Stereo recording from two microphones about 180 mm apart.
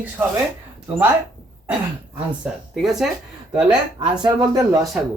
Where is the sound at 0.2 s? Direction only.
10° right (ahead or behind).